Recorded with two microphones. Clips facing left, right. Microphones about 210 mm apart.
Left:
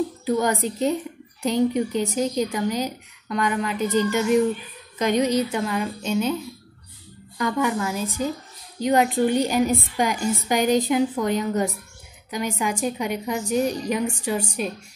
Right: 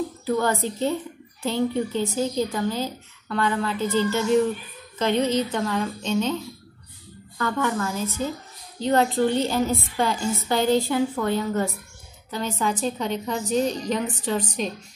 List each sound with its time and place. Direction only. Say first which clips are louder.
0.2 s speech: even; 15° left (ahead or behind)
7.3 s speech: left 2 dB; 15° left (ahead or behind)